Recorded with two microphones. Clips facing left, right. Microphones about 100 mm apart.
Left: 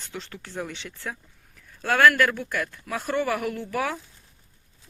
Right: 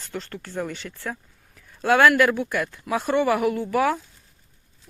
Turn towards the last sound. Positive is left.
turn(degrees=-5)  # may be behind; listen again after turning